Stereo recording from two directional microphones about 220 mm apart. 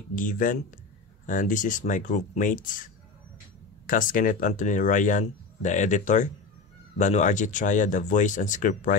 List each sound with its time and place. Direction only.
0.1 s speech: 35° left (ahead or behind)